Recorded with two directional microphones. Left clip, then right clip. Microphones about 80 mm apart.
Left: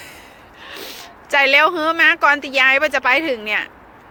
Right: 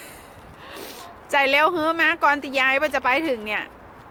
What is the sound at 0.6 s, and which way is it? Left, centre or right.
A woman's voice, right.